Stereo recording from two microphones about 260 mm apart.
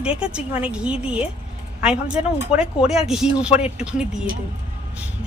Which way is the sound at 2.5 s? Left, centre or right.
Centre.